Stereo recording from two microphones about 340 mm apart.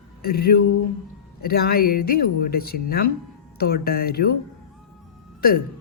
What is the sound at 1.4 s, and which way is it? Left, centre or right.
Speech, left.